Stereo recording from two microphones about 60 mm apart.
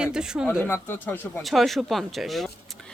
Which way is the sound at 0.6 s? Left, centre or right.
Left.